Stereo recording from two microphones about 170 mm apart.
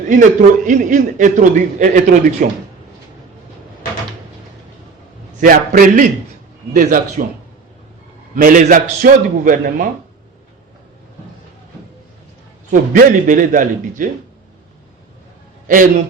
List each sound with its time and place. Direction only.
0.1 s a man's voice: 50° right (ahead or behind)
5.4 s a man's voice: 55° right (ahead or behind)
8.4 s a man's voice: 50° right (ahead or behind)
12.7 s a man's voice: 55° right (ahead or behind)
15.6 s a man's voice: 50° right (ahead or behind)